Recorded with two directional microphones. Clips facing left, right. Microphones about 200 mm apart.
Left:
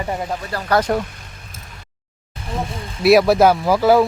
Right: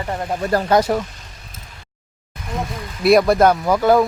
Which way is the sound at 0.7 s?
20° right (ahead or behind).